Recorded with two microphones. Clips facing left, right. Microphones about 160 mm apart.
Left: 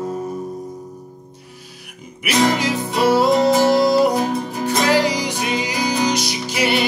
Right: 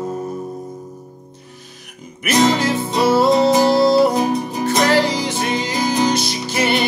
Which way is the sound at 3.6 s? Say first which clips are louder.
Right 1 dB; 15° left (ahead or behind).